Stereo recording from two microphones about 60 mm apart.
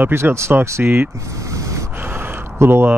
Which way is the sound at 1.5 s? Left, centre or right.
Right.